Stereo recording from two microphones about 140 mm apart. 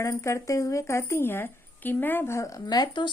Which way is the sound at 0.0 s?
20° left (ahead or behind).